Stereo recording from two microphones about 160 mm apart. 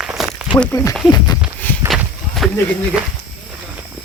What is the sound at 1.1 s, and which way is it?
Speech, 25° left (ahead or behind).